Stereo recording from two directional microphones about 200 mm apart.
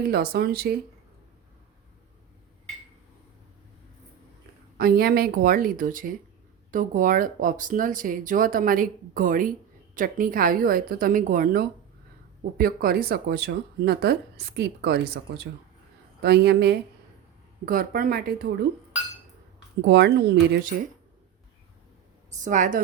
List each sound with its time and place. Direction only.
0.1 s speech: 50° right (ahead or behind)
4.8 s speech: 50° right (ahead or behind)
16.2 s speech: 55° right (ahead or behind)
19.9 s speech: 55° right (ahead or behind)
22.3 s a woman's voice: 40° right (ahead or behind)